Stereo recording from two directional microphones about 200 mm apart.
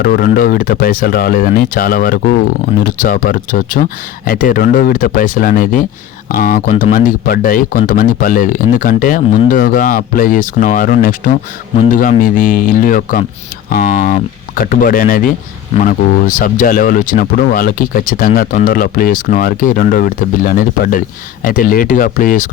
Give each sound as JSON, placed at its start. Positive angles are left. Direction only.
{"t": 0.0, "sound": "speech", "side_deg": 45}